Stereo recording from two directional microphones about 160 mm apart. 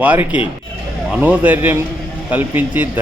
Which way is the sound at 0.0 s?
10° right (ahead or behind).